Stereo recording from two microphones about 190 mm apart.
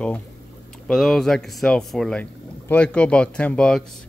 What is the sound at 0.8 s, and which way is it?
Speech, centre (ahead or behind).